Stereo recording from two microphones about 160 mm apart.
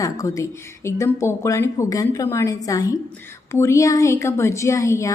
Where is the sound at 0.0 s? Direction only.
20° left (ahead or behind).